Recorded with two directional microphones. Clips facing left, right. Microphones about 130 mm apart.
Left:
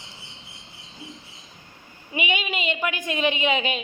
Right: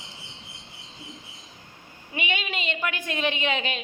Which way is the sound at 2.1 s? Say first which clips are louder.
Left 3 dB; 5° left (ahead or behind).